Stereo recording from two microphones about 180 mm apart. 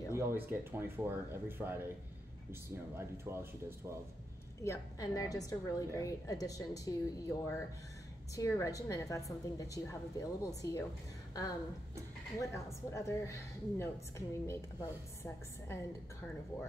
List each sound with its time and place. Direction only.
0.1 s speech: 15° right (ahead or behind)
4.6 s a woman's voice: 20° left (ahead or behind)
12.4 s a woman's voice: 15° left (ahead or behind)